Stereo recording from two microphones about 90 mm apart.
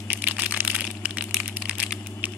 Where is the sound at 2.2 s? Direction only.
20° right (ahead or behind).